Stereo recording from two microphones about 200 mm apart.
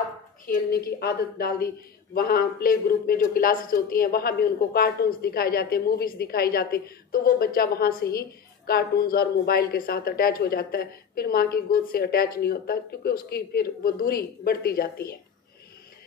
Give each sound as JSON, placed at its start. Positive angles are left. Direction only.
{"t": 0.5, "sound": "speech", "side_deg": 50}